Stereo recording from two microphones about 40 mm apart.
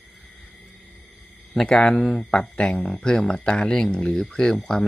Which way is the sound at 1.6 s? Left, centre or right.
Centre.